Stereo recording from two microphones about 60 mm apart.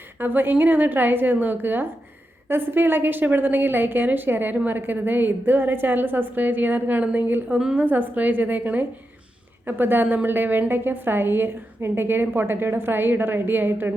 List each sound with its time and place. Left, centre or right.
0.2 s a woman's voice: right